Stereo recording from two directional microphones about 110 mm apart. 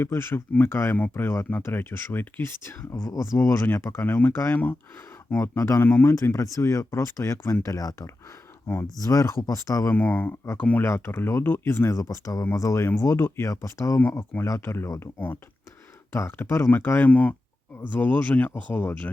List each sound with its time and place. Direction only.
0.0 s speech: 20° left (ahead or behind)
5.4 s speech: 25° left (ahead or behind)
9.9 s speech: 15° left (ahead or behind)